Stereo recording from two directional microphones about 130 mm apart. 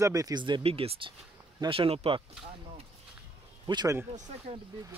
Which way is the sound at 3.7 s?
35° right (ahead or behind).